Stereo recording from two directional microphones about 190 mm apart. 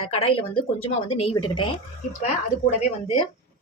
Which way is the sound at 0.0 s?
30° left (ahead or behind).